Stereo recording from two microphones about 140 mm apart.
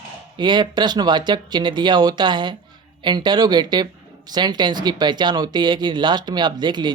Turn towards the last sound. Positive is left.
turn(degrees=-30)  # may be behind; listen again after turning